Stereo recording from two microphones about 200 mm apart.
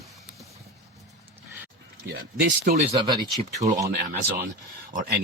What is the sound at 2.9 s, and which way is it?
Speech, 20° right (ahead or behind).